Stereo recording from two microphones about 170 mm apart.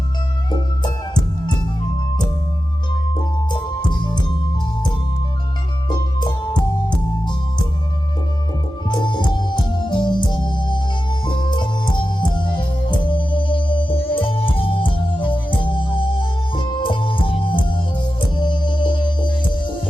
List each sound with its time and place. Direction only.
0.5 s music: 25° left (ahead or behind)
3.5 s music: 25° left (ahead or behind)
6.1 s music: 25° left (ahead or behind)
8.9 s music: 25° left (ahead or behind)